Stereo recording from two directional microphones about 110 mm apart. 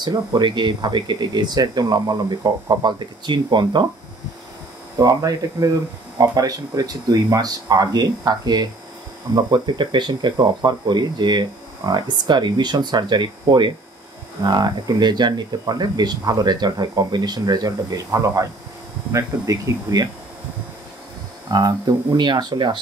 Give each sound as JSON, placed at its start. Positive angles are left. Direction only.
{"t": 0.0, "sound": "speech", "side_deg": -40}
{"t": 4.9, "sound": "speech", "side_deg": -35}
{"t": 21.5, "sound": "speech", "side_deg": -35}